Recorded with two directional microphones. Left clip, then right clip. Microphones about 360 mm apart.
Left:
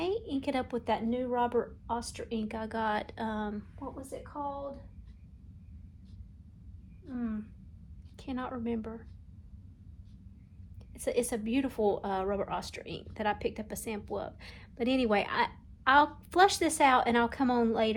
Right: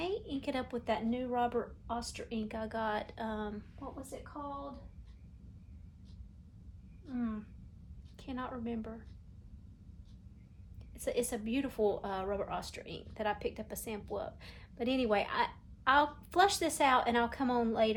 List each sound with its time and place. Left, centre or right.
0.0 s speech: centre
8.1 s speech: centre
10.9 s a woman's voice: centre